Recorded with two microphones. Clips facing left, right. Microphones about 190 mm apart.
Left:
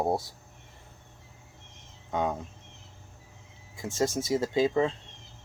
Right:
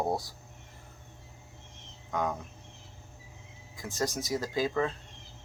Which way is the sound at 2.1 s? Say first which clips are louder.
Left 3 dB; 25° left (ahead or behind).